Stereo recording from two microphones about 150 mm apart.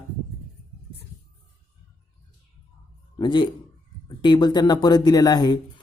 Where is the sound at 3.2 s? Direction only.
30° left (ahead or behind).